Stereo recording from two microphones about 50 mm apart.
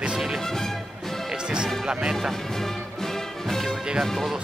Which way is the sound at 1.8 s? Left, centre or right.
Centre.